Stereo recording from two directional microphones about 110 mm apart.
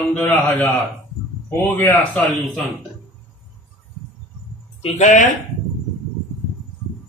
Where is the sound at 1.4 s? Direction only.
25° left (ahead or behind).